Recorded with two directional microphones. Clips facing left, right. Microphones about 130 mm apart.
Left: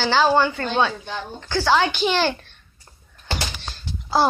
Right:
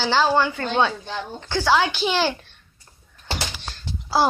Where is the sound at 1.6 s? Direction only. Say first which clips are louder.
Left 1 dB; 5° right (ahead or behind).